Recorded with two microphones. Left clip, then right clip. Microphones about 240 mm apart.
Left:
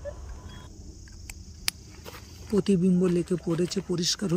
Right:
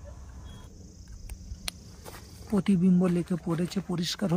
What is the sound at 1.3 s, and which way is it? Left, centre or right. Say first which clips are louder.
Walk: left 7 dB; right.